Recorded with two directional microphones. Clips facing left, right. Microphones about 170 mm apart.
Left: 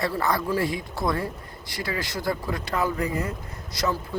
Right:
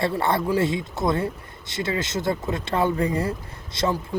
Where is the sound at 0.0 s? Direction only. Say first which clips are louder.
Right 3 dB; 25° right (ahead or behind).